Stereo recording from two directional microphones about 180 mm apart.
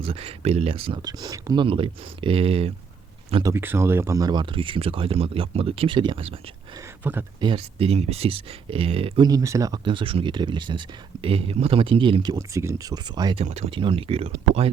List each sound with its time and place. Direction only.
0.0 s speech: 35° right (ahead or behind)
3.4 s speech: 15° right (ahead or behind); by 6.3 s 30° right (ahead or behind)
7.0 s speech: 10° right (ahead or behind)
7.4 s speech: 30° right (ahead or behind)
13.4 s speech: 35° right (ahead or behind)